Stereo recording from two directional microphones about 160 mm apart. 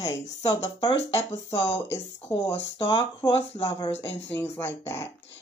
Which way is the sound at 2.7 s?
30° left (ahead or behind).